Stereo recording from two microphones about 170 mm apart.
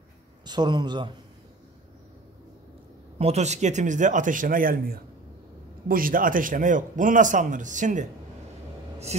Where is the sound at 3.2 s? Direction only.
40° right (ahead or behind).